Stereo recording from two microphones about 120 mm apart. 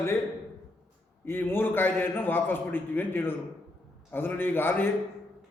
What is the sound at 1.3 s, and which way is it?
A man's voice, 20° left (ahead or behind).